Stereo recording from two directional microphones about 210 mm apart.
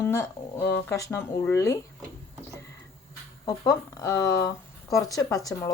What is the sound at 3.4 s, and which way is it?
A woman's voice, 15° left (ahead or behind).